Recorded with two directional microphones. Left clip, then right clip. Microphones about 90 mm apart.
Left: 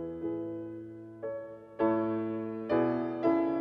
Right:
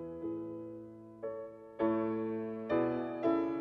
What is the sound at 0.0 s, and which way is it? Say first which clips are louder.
Music: left 5 dB; 15° left (ahead or behind).